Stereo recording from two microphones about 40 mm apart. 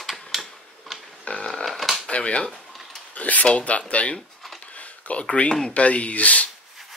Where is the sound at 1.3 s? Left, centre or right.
Left.